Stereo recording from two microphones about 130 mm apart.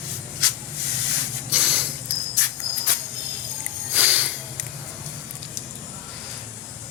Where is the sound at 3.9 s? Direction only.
10° right (ahead or behind).